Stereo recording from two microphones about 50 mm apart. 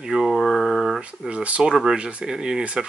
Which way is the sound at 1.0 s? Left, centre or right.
Right.